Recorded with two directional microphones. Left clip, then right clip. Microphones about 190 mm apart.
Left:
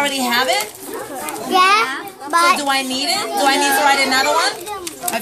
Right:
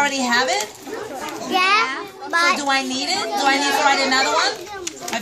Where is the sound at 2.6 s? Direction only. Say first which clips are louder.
Left 2 dB; 5° left (ahead or behind).